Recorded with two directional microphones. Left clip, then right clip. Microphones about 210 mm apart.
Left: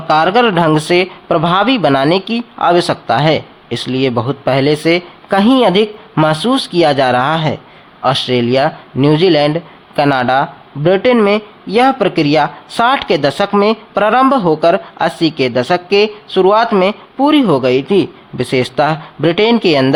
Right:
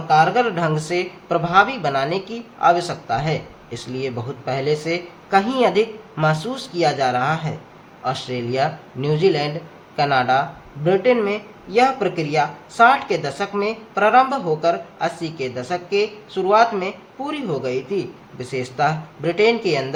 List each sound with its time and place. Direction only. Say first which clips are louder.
0.1 s speech: left 6 dB; 40° left (ahead or behind)